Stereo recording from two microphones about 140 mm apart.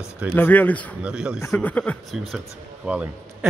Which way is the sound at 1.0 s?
5° right (ahead or behind).